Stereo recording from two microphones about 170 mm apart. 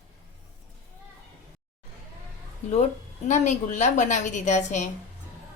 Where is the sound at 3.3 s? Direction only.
45° left (ahead or behind).